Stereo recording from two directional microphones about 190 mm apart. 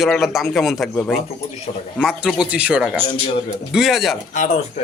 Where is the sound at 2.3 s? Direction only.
5° right (ahead or behind).